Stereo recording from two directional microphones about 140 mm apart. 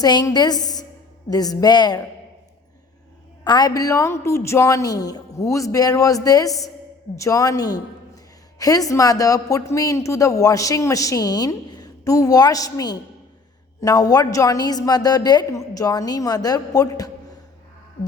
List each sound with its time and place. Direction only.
0.0 s a woman's voice: 30° left (ahead or behind)
3.4 s a woman's voice: 30° left (ahead or behind)